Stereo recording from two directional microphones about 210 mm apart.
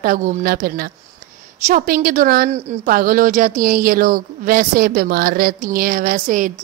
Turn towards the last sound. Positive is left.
turn(degrees=-40)  # may be behind; listen again after turning